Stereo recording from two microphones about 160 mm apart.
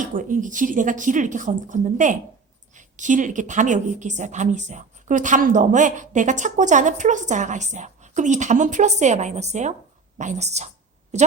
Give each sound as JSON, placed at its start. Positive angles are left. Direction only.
{"t": 0.0, "sound": "a woman's voice", "side_deg": -55}